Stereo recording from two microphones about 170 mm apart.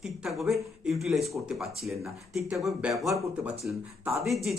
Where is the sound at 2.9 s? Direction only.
15° right (ahead or behind).